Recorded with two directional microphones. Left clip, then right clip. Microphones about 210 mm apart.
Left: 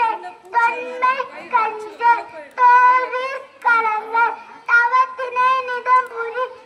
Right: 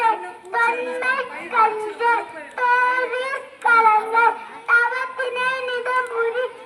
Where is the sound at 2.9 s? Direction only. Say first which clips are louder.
Left 3 dB; 30° left (ahead or behind).